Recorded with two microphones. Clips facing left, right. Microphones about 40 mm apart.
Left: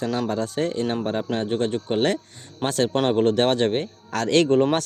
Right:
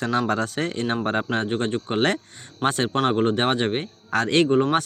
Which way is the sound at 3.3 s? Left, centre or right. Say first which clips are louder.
Left 2 dB; right.